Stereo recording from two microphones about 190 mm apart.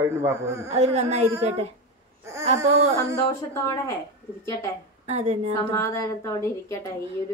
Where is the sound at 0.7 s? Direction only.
35° right (ahead or behind).